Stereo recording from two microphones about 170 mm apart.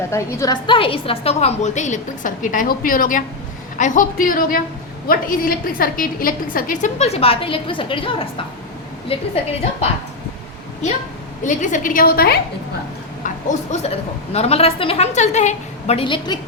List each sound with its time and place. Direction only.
0.1 s a woman's voice: 15° left (ahead or behind); by 9.2 s 35° left (ahead or behind)
11.4 s a woman's voice: 50° left (ahead or behind); by 12.4 s 65° left (ahead or behind)
13.2 s a woman's voice: 45° left (ahead or behind); by 16.4 s 25° left (ahead or behind)